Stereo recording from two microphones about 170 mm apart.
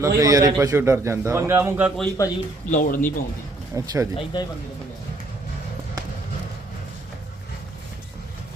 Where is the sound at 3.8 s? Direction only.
20° right (ahead or behind).